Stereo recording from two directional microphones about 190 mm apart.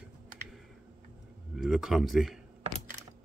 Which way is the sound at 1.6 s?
5° right (ahead or behind).